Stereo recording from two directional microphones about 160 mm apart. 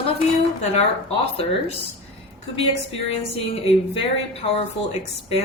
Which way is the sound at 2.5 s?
35° left (ahead or behind).